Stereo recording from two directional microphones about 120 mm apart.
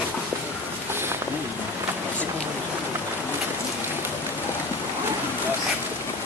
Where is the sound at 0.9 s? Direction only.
20° right (ahead or behind).